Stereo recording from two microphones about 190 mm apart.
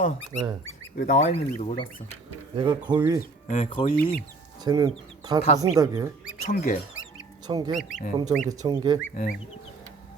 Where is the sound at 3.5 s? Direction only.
40° left (ahead or behind).